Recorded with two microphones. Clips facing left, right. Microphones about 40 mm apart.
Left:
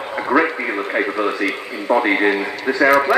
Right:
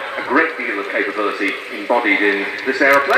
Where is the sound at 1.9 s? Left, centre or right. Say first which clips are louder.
Right 1 dB; right.